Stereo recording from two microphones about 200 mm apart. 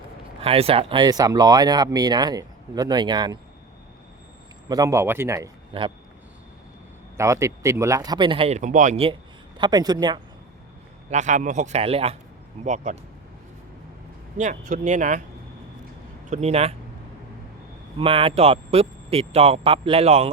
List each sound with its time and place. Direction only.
0.4 s speech: 30° right (ahead or behind)
4.7 s speech: 15° right (ahead or behind)
5.7 s speech: 25° right (ahead or behind)
7.2 s speech: 15° right (ahead or behind); by 9.1 s 30° right (ahead or behind)
9.6 s speech: 20° right (ahead or behind)
11.1 s speech: 35° right (ahead or behind)
14.6 s speech: 40° right (ahead or behind)
16.3 s speech: 30° right (ahead or behind)
17.9 s speech: 25° right (ahead or behind)